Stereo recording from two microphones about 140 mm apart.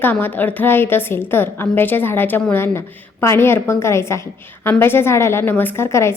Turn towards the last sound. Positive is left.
turn(degrees=20)  # may be behind; listen again after turning